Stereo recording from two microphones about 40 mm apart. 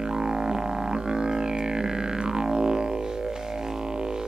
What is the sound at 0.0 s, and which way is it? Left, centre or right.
Music, centre.